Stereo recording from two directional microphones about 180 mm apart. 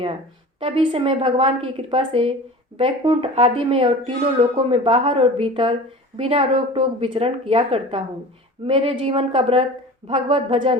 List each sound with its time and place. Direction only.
0.6 s a woman's voice: 30° right (ahead or behind)